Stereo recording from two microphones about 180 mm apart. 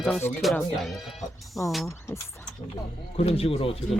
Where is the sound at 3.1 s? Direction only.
35° left (ahead or behind).